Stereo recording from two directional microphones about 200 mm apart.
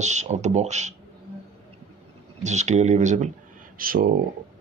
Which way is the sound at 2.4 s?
35° right (ahead or behind).